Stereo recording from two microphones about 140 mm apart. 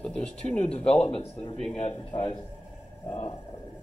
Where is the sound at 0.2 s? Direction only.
50° left (ahead or behind).